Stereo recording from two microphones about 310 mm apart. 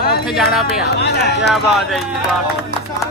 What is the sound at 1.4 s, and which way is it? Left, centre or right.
Speech, centre.